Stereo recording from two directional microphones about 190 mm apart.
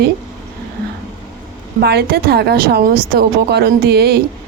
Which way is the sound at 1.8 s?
55° right (ahead or behind).